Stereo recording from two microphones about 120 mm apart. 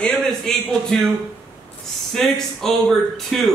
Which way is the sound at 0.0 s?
5° left (ahead or behind).